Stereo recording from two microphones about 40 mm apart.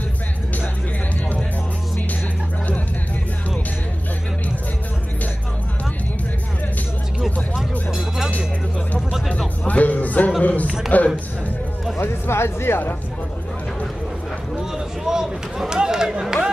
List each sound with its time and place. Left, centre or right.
9.7 s music: left
10.4 s a sound: left
10.9 s music: left
12.0 s music: left
14.6 s run: centre